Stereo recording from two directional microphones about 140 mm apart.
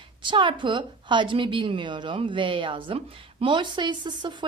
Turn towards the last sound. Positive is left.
turn(degrees=-30)  # may be behind; listen again after turning